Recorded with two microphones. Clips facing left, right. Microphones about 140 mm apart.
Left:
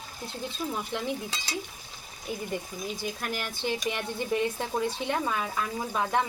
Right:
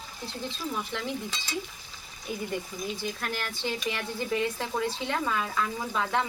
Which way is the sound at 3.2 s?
10° left (ahead or behind).